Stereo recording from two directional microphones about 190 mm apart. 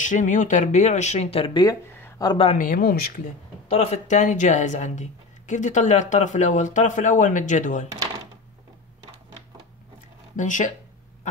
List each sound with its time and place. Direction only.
0.0 s speech: 40° left (ahead or behind); by 2.5 s 25° left (ahead or behind)
2.5 s speech: 45° left (ahead or behind)
3.6 s speech: 35° left (ahead or behind)
10.3 s speech: 40° left (ahead or behind)